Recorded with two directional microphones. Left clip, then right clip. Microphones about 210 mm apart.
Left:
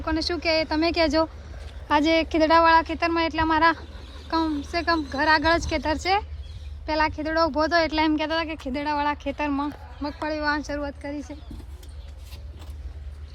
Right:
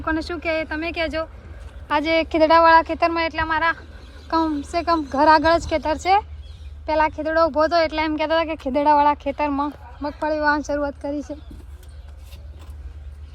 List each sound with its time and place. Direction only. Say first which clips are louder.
0.0 s speech: right 1 dB; 5° left (ahead or behind); by 3.8 s 25° left (ahead or behind)
4.3 s speech: right 4 dB; 10° left (ahead or behind)